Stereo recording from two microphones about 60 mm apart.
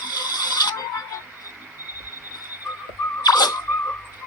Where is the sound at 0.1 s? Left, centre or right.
Left.